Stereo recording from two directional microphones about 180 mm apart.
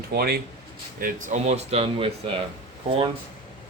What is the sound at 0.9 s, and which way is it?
A man's voice, 50° right (ahead or behind).